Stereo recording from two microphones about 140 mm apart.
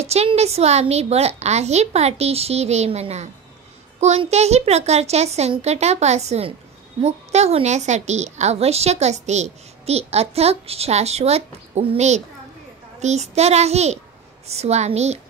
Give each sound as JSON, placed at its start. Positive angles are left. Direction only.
{"t": 0.0, "sound": "a woman's voice", "side_deg": -50}